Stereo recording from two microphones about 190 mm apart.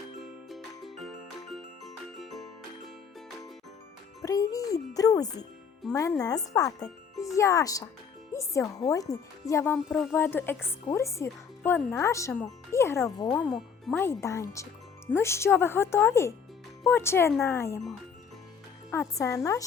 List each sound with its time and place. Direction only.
0.2 s music: centre (ahead or behind)
4.2 s speech: 15° left (ahead or behind)
6.8 s music: centre (ahead or behind)
7.3 s speech: 15° left (ahead or behind)
13.2 s speech: 5° left (ahead or behind)
14.0 s speech: 15° left (ahead or behind)
18.9 s speech: 15° left (ahead or behind)